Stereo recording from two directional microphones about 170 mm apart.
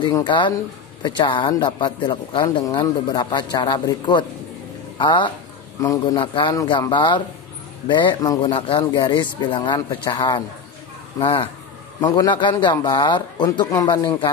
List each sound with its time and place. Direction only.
0.0 s speech: 25° left (ahead or behind)